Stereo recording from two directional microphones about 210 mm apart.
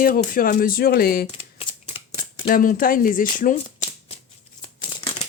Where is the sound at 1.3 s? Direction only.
30° left (ahead or behind).